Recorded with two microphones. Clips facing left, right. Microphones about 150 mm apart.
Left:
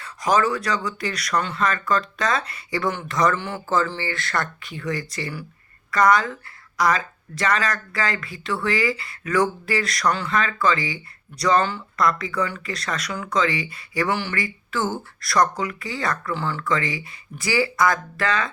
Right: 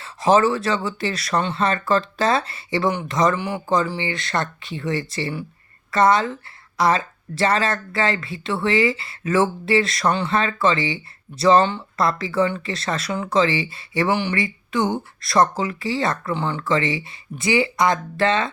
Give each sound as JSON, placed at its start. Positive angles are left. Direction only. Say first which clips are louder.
{"t": 0.0, "sound": "speech", "louder": "right 4 dB", "side_deg": -25}